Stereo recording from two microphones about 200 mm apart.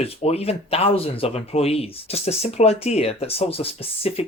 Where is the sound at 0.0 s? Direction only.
30° left (ahead or behind).